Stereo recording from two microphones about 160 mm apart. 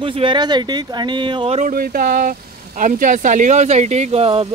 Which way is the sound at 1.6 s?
60° right (ahead or behind).